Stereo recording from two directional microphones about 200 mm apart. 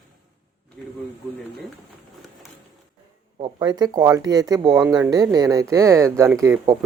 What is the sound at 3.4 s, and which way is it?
Speech, 25° right (ahead or behind).